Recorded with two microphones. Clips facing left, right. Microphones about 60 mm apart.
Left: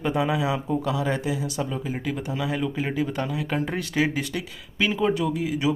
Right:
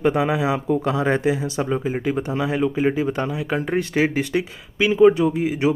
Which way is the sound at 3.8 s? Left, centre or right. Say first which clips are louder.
Right 7 dB; right.